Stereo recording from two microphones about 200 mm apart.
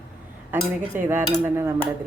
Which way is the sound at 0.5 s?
10° right (ahead or behind).